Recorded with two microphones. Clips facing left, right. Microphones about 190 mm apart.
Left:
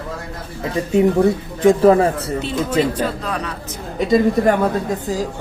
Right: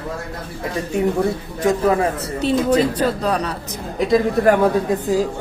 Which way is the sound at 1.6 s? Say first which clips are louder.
Left 5 dB; 30° left (ahead or behind).